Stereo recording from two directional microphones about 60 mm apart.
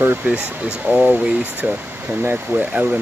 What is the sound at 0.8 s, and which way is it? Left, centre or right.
Speech, right.